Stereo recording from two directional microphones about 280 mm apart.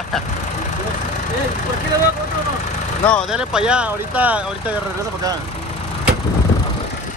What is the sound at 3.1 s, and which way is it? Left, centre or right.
Speech, centre.